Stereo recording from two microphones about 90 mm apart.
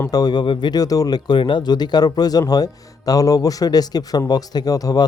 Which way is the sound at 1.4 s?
60° left (ahead or behind).